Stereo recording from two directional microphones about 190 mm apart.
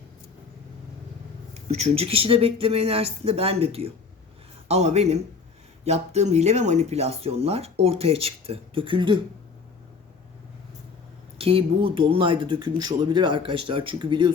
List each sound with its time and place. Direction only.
1.5 s speech: 35° right (ahead or behind)
11.3 s speech: 30° right (ahead or behind)